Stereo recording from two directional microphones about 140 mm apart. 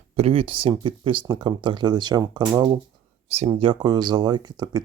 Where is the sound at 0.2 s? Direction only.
45° right (ahead or behind).